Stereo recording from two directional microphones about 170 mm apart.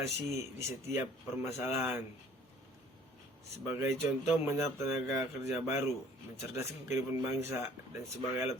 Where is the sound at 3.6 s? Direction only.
15° right (ahead or behind).